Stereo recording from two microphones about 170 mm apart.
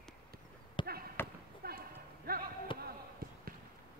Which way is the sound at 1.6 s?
60° right (ahead or behind).